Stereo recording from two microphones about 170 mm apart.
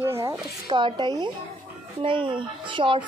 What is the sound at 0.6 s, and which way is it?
Speech, 25° right (ahead or behind).